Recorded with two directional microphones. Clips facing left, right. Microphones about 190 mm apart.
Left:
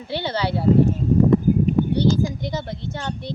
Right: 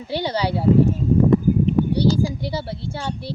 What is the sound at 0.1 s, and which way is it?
Speech, 15° right (ahead or behind).